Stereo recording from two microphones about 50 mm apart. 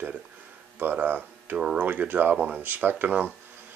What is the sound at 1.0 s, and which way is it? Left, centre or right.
Speech, right.